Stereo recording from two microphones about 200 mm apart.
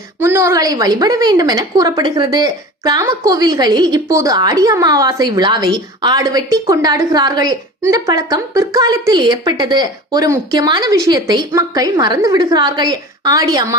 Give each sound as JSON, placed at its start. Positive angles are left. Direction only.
{"t": 0.2, "sound": "a woman's voice", "side_deg": -10}